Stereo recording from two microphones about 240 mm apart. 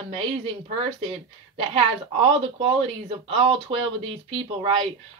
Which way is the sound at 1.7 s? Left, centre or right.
Right.